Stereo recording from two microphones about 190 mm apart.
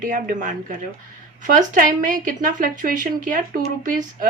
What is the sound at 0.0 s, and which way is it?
Speech, 45° right (ahead or behind).